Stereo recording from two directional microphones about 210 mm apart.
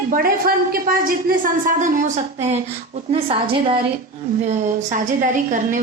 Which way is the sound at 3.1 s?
25° right (ahead or behind).